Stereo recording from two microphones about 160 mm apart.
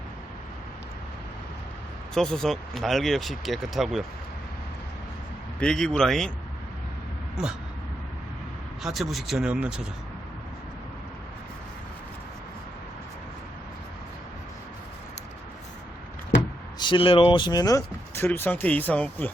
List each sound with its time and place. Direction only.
2.1 s speech: 5° left (ahead or behind)
5.5 s speech: 5° left (ahead or behind)
8.8 s speech: centre (ahead or behind)
16.7 s speech: 30° left (ahead or behind); by 19.3 s 10° left (ahead or behind)